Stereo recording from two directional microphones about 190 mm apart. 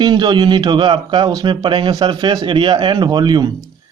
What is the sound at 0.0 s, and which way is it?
Speech, 25° right (ahead or behind).